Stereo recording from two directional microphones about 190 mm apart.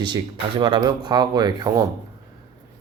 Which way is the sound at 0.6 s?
20° right (ahead or behind).